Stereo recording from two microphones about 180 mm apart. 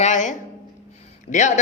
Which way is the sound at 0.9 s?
40° left (ahead or behind).